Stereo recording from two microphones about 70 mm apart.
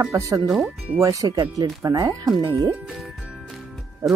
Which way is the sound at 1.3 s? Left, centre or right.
Right.